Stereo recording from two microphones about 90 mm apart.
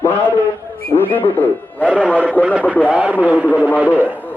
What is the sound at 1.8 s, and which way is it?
Speech, 15° right (ahead or behind).